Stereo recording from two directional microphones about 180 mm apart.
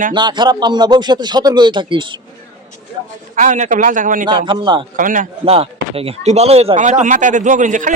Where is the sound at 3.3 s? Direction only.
45° right (ahead or behind).